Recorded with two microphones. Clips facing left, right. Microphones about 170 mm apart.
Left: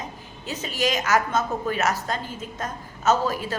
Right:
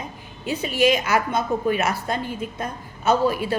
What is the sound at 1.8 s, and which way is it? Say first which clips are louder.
Speech: right 1 dB; 40° left (ahead or behind).